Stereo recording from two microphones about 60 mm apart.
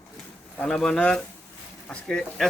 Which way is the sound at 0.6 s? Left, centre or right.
Centre.